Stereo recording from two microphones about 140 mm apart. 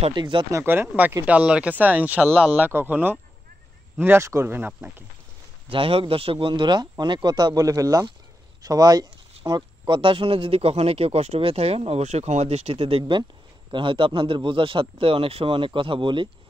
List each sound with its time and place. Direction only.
0.1 s a man's voice: 35° right (ahead or behind)
0.5 s speech: 15° right (ahead or behind)
5.7 s a man's voice: 40° right (ahead or behind)